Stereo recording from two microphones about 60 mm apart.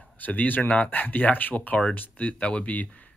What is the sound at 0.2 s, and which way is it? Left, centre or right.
Speech, left.